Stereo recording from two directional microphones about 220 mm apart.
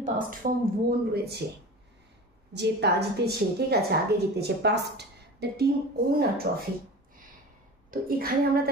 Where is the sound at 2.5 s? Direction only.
50° right (ahead or behind).